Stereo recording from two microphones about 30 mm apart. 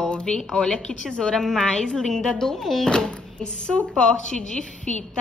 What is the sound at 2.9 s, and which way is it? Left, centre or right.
A woman's voice, left.